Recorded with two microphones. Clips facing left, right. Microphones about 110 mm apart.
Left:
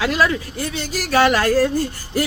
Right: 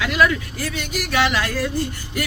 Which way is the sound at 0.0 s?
35° left (ahead or behind).